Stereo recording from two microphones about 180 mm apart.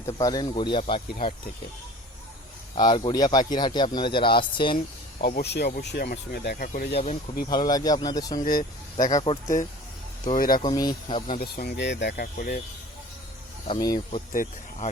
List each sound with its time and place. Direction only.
0.2 s speech: 20° left (ahead or behind)
2.7 s speech: 25° left (ahead or behind)
5.2 s speech: 65° left (ahead or behind)
6.9 s speech: 35° left (ahead or behind)
7.4 s speech: 20° left (ahead or behind)
8.4 s speech: 50° left (ahead or behind)
9.0 s speech: 25° left (ahead or behind)
10.2 s speech: 50° left (ahead or behind)
10.6 s speech: 20° left (ahead or behind)
11.3 s speech: 55° left (ahead or behind)
13.7 s speech: 20° left (ahead or behind)